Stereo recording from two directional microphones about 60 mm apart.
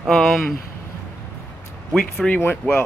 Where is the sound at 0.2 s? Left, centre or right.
Centre.